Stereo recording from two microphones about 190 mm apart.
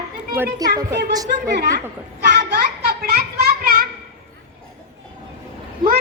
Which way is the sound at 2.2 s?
60° right (ahead or behind).